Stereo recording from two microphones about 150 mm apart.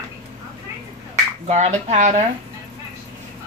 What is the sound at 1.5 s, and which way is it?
Speech, 50° right (ahead or behind).